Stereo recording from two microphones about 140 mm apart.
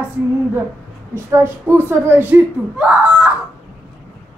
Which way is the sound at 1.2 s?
20° right (ahead or behind).